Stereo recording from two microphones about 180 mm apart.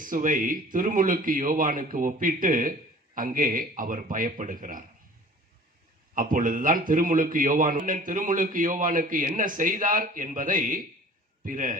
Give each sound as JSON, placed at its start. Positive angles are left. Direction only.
{"t": 0.0, "sound": "a man's voice", "side_deg": -50}
{"t": 6.1, "sound": "a man's voice", "side_deg": -50}